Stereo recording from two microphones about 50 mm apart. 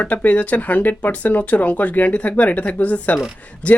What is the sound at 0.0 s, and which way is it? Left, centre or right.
Speech, left.